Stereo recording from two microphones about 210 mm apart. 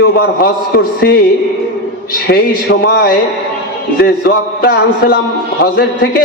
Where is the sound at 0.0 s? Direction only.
50° left (ahead or behind).